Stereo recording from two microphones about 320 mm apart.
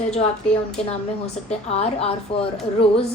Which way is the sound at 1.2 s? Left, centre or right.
Centre.